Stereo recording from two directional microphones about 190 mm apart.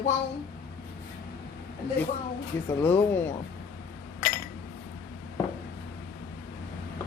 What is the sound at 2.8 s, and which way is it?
Speech, 10° left (ahead or behind).